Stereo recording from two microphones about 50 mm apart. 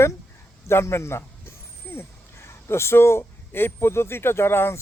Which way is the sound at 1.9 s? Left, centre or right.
Left.